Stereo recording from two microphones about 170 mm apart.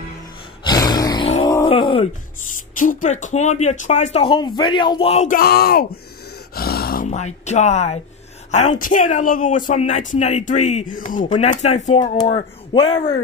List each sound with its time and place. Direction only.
0.7 s roar: 25° left (ahead or behind)
1.4 s groan: 20° left (ahead or behind)
1.7 s speech: 30° left (ahead or behind)
2.8 s speech: 50° left (ahead or behind)
5.4 s speech: 65° left (ahead or behind)
6.5 s a sound: 65° left (ahead or behind)
7.1 s speech: 40° left (ahead or behind)